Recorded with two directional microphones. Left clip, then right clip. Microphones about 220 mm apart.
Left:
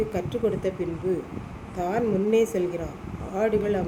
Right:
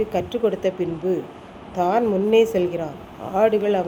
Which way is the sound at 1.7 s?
15° right (ahead or behind).